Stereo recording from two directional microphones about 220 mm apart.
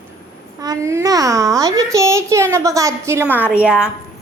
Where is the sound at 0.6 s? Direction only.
15° right (ahead or behind).